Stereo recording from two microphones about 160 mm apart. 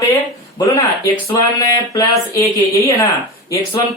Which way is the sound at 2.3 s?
20° left (ahead or behind).